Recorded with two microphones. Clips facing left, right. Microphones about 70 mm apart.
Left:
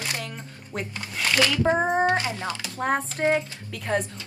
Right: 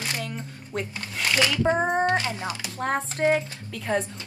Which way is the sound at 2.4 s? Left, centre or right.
Right.